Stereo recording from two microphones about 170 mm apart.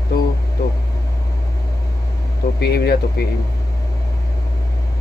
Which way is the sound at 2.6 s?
65° left (ahead or behind).